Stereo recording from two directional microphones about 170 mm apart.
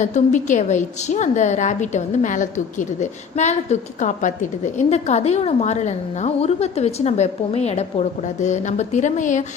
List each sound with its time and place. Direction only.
0.0 s a woman's voice: 45° left (ahead or behind)